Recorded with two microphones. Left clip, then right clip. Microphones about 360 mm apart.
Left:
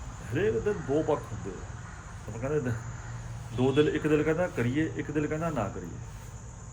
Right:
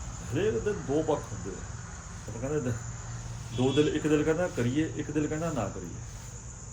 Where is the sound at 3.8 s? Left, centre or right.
Centre.